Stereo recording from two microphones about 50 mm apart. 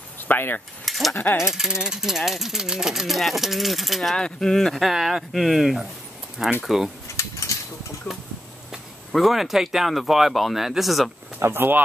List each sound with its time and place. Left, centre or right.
0.3 s speech: left
0.8 s cutlery: centre
1.1 s speech: left
1.4 s speech: centre
4.2 s speech: centre
4.7 s speech: centre
9.1 s speech: centre
11.3 s speech: right